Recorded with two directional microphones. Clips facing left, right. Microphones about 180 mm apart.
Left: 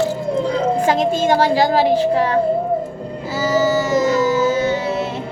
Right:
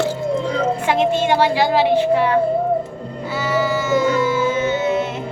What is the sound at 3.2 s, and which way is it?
Music, 40° left (ahead or behind).